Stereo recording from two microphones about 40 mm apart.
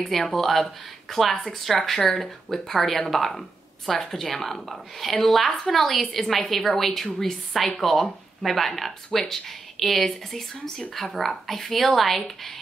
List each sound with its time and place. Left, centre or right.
0.0 s speech: centre